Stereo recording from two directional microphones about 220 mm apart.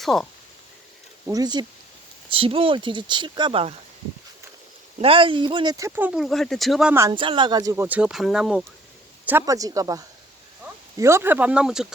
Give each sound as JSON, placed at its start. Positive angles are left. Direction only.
{"t": 0.0, "sound": "speech", "side_deg": 0}
{"t": 1.3, "sound": "speech", "side_deg": -20}
{"t": 4.9, "sound": "speech", "side_deg": -25}